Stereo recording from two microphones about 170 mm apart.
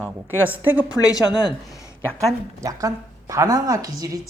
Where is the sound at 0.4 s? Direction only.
10° right (ahead or behind).